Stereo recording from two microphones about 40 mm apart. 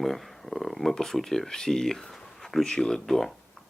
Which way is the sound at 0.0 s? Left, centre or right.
Centre.